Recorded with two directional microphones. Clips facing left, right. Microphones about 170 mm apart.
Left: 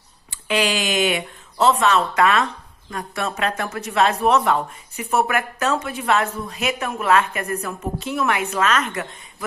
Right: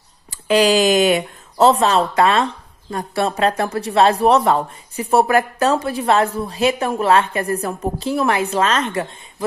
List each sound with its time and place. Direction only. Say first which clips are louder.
0.3 s speech: right 7 dB; 40° right (ahead or behind)